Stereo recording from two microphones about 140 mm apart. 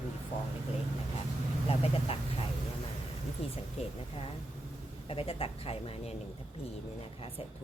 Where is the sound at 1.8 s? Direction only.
45° left (ahead or behind).